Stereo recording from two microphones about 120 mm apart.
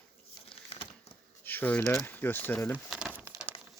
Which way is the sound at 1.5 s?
15° left (ahead or behind).